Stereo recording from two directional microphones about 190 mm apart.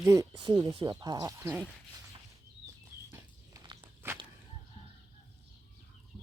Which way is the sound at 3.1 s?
20° right (ahead or behind).